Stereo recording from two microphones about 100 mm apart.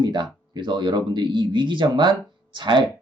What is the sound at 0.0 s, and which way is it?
Speech, 50° right (ahead or behind).